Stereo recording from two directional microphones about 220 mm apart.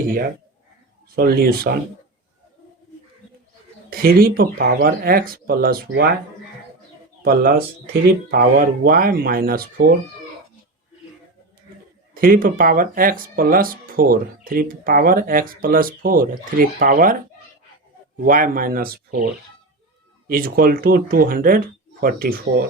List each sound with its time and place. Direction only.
1.1 s speech: 45° right (ahead or behind)
3.8 s speech: 40° right (ahead or behind)
7.2 s speech: 40° right (ahead or behind)
12.1 s speech: 40° right (ahead or behind)
18.2 s speech: 40° right (ahead or behind)
20.2 s speech: 40° right (ahead or behind)